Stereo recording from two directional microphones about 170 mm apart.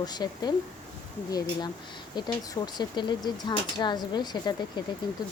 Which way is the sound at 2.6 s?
25° left (ahead or behind).